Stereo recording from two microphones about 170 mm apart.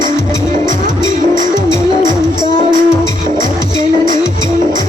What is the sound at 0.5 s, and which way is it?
Music, 50° right (ahead or behind).